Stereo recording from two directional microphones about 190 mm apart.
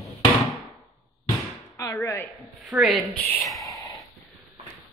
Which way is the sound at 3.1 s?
10° left (ahead or behind).